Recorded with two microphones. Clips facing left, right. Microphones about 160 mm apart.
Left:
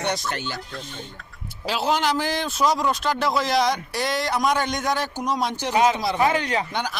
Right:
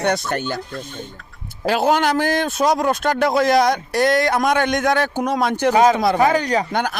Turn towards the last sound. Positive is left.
turn(degrees=-45)  # may be behind; listen again after turning